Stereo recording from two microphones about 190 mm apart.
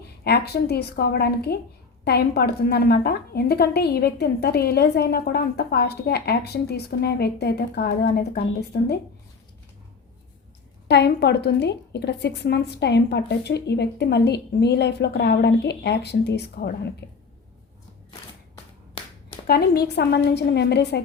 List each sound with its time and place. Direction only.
0.3 s a woman's voice: 55° left (ahead or behind)
10.8 s a woman's voice: 60° left (ahead or behind)
19.0 s a sound: 25° left (ahead or behind)
19.5 s a woman's voice: 55° left (ahead or behind)